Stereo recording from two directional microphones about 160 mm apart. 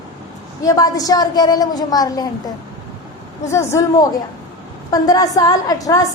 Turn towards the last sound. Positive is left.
turn(degrees=20)  # may be behind; listen again after turning